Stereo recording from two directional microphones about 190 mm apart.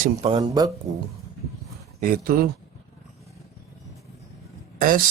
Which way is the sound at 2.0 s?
50° right (ahead or behind).